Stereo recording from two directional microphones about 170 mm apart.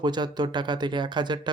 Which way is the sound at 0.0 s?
25° right (ahead or behind).